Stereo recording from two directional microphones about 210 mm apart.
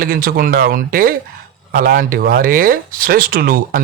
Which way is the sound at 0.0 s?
45° right (ahead or behind).